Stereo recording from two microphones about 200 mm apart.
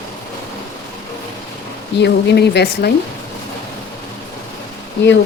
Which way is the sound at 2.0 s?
55° left (ahead or behind).